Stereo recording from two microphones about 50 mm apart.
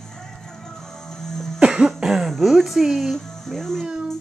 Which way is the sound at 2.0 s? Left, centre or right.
Centre.